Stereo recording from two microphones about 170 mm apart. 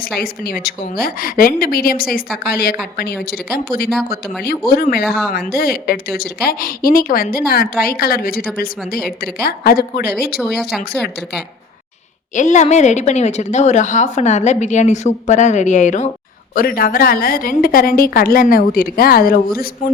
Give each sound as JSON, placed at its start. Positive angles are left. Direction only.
{"t": 0.2, "sound": "a woman's voice", "side_deg": 65}
{"t": 5.0, "sound": "speech", "side_deg": 0}
{"t": 5.5, "sound": "a woman's voice", "side_deg": 65}
{"t": 10.3, "sound": "speech", "side_deg": 0}
{"t": 12.3, "sound": "a woman's voice", "side_deg": 45}
{"t": 16.6, "sound": "a woman's voice", "side_deg": 60}